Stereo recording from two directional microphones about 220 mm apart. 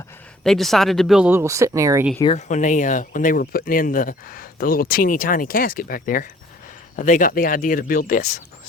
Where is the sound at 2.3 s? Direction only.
30° left (ahead or behind).